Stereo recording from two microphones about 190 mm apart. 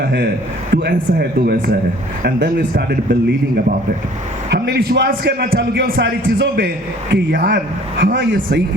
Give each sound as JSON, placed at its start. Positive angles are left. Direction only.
{"t": 0.7, "sound": "a man's voice", "side_deg": -60}
{"t": 8.0, "sound": "speech", "side_deg": -65}